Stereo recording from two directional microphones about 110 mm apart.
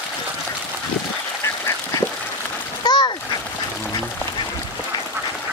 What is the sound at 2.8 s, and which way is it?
Splash, 40° left (ahead or behind).